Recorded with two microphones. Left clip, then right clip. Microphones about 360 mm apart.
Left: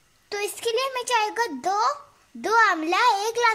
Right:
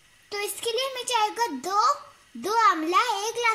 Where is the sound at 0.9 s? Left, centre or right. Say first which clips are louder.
Left 2 dB; left.